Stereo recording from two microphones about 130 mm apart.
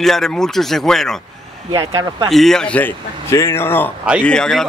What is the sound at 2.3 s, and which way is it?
A man's voice, centre (ahead or behind).